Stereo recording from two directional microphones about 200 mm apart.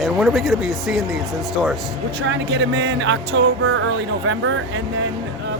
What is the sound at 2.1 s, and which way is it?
Speech, 65° right (ahead or behind).